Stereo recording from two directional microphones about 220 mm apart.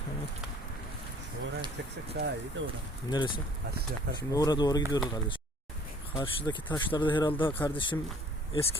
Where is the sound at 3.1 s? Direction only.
20° left (ahead or behind).